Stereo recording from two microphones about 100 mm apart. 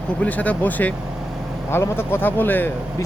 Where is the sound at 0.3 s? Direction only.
15° left (ahead or behind).